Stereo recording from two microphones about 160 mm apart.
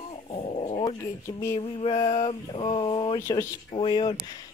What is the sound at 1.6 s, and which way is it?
Speech, 35° left (ahead or behind).